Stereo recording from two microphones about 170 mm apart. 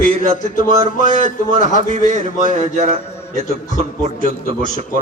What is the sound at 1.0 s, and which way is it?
Speech, 50° left (ahead or behind).